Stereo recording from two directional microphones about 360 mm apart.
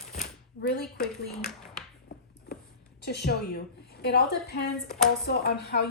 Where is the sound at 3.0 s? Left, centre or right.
Left.